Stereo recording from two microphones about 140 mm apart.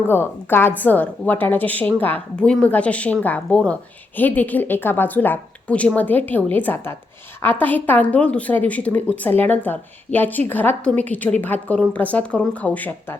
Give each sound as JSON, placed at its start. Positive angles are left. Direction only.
{"t": 0.1, "sound": "a woman's voice", "side_deg": 15}